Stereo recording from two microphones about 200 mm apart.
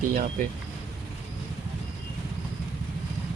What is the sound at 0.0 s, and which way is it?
Speech, 45° right (ahead or behind).